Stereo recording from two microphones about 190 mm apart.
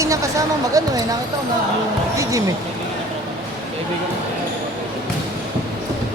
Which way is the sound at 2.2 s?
15° right (ahead or behind).